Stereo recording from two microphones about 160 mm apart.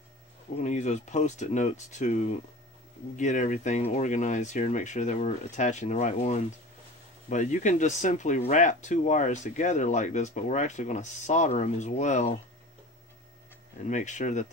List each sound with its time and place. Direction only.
0.6 s speech: 45° left (ahead or behind)
13.8 s speech: 50° left (ahead or behind)